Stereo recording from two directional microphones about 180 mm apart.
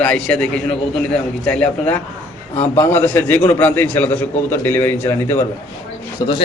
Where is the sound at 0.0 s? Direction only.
5° left (ahead or behind).